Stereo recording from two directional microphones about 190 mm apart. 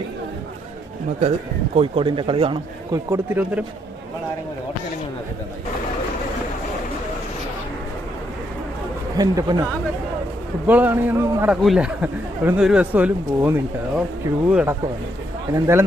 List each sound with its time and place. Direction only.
1.7 s a man's voice: 25° right (ahead or behind)
3.1 s speech: 10° right (ahead or behind)
9.1 s a man's voice: 20° right (ahead or behind)
10.7 s speech: 10° right (ahead or behind)